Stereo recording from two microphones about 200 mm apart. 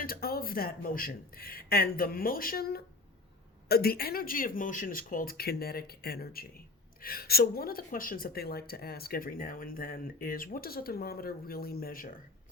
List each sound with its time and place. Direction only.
0.0 s speech: 50° left (ahead or behind)